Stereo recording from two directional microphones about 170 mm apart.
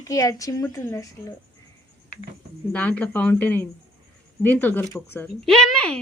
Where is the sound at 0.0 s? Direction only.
20° left (ahead or behind).